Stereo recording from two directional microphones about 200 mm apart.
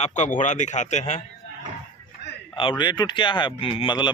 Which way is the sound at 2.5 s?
25° left (ahead or behind).